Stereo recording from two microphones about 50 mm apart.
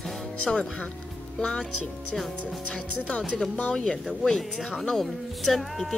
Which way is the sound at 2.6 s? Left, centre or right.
Left.